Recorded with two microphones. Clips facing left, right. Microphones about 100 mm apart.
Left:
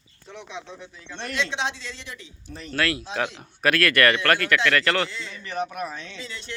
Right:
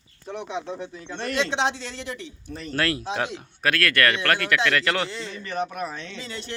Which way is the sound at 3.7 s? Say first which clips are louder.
Left 2 dB; 5° left (ahead or behind).